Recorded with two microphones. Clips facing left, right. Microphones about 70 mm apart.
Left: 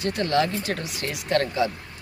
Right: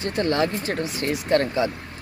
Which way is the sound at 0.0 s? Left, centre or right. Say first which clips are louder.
Right 1 dB; right.